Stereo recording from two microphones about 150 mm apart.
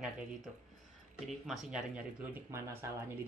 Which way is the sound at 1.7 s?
10° right (ahead or behind).